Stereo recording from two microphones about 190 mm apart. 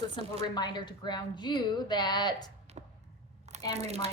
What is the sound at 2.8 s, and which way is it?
Arrow, 35° right (ahead or behind).